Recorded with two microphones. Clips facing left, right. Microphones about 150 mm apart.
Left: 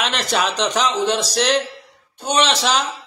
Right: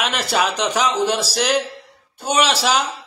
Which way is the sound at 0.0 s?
5° right (ahead or behind).